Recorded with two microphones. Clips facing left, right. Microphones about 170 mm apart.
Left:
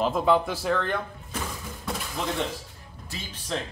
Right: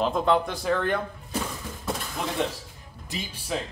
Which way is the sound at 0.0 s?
5° left (ahead or behind).